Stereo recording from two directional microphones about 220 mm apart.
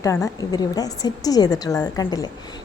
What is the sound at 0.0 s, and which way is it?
A woman's voice, 15° left (ahead or behind).